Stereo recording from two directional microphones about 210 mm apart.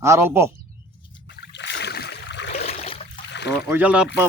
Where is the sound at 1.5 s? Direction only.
55° left (ahead or behind).